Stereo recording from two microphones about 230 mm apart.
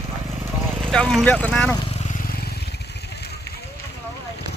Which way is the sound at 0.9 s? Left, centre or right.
Centre.